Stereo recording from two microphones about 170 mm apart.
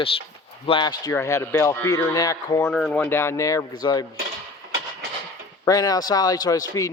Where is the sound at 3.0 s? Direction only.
15° left (ahead or behind).